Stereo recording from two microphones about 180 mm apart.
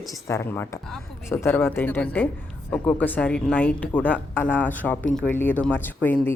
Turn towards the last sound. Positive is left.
turn(degrees=10)  # may be behind; listen again after turning